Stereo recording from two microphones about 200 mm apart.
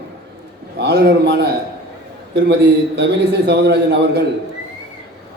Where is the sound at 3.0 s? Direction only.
55° right (ahead or behind).